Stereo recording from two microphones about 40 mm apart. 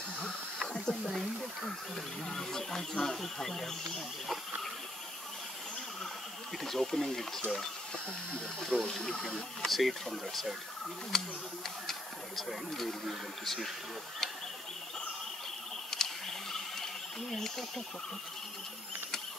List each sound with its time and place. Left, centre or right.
0.6 s a sound: centre
2.2 s speech: centre
6.6 s speech: centre
8.3 s speech: left
9.7 s speech: centre
15.9 s a sound: centre